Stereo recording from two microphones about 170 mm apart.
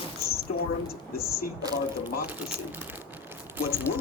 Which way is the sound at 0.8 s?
65° left (ahead or behind).